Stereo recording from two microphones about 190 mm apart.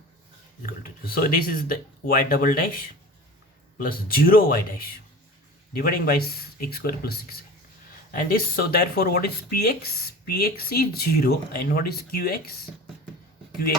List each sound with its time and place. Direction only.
0.6 s speech: 50° left (ahead or behind)
3.8 s speech: 50° left (ahead or behind)